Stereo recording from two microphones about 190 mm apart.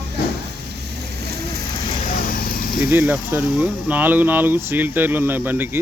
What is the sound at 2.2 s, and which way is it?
Vehicle, 50° left (ahead or behind).